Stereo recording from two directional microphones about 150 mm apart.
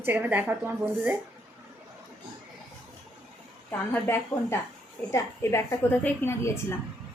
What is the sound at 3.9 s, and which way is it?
A woman's voice, 15° left (ahead or behind).